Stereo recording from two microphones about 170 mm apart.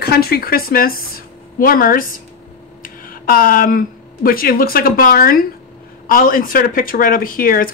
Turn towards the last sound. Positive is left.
turn(degrees=55)  # may be behind; listen again after turning